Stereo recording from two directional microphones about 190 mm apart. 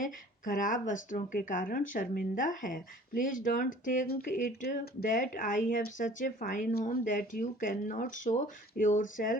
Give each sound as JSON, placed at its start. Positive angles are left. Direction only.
{"t": 0.0, "sound": "speech", "side_deg": 45}